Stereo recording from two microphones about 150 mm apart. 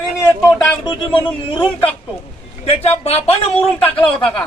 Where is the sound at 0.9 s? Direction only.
35° left (ahead or behind).